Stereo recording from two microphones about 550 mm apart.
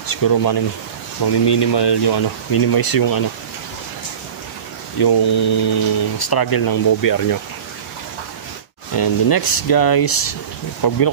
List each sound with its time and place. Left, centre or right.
0.0 s speech: left
4.9 s speech: left
8.9 s speech: left